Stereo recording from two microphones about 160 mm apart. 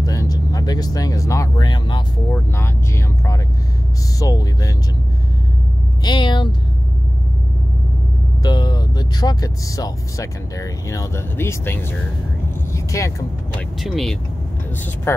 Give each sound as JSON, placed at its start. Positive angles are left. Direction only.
{"t": 0.0, "sound": "speech", "side_deg": 20}
{"t": 2.3, "sound": "speech", "side_deg": 15}
{"t": 6.0, "sound": "speech", "side_deg": 30}
{"t": 8.4, "sound": "speech", "side_deg": 25}
{"t": 12.7, "sound": "vehicle", "side_deg": 20}
{"t": 13.7, "sound": "speech", "side_deg": 0}
{"t": 15.1, "sound": "speech", "side_deg": 15}